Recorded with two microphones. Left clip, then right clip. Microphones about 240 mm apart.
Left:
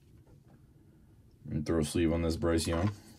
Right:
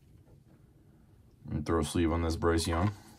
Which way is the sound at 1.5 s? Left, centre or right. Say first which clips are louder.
Right 1 dB; centre.